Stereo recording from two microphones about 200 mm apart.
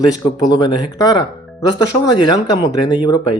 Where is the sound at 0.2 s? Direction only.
20° left (ahead or behind).